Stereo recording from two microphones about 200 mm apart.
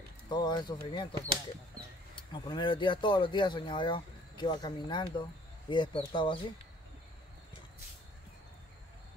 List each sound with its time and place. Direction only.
0.3 s speech: 20° left (ahead or behind)
2.1 s speech: 25° left (ahead or behind)